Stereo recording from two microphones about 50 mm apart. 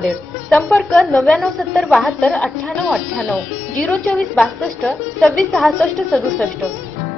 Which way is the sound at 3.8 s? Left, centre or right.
Centre.